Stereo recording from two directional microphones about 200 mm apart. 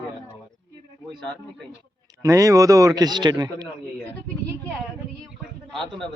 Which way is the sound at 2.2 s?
15° right (ahead or behind).